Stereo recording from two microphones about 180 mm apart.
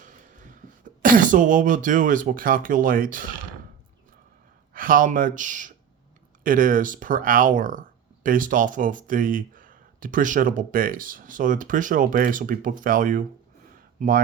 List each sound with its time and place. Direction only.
0.0 s a sound: 45° right (ahead or behind)
1.0 s speech: 50° right (ahead or behind)
4.7 s speech: 50° right (ahead or behind)